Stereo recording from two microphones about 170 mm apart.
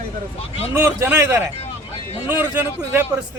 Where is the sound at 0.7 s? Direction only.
10° right (ahead or behind).